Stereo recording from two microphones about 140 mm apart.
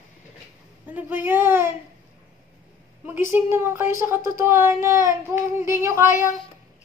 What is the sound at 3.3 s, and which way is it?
A woman's voice, 15° right (ahead or behind).